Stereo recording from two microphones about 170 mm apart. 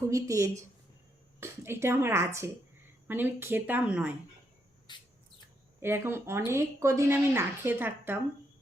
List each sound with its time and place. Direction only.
0.1 s a woman's voice: 20° right (ahead or behind)
4.9 s rodents: 25° left (ahead or behind)
5.8 s speech: 15° right (ahead or behind)